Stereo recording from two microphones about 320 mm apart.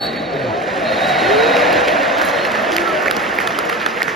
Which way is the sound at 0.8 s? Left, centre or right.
Centre.